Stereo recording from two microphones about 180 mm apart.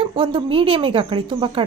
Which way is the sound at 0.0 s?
30° right (ahead or behind).